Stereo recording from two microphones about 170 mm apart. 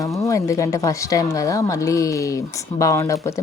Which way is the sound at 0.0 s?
20° left (ahead or behind).